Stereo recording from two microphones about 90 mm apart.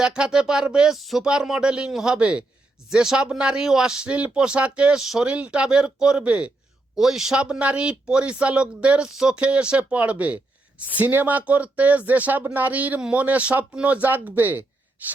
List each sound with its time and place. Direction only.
0.0 s speech: 10° right (ahead or behind)
15.0 s gasp: 20° right (ahead or behind)